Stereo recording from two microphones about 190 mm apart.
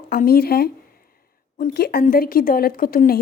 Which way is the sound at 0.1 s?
50° left (ahead or behind).